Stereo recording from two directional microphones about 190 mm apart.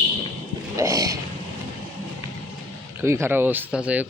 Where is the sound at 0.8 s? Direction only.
15° right (ahead or behind).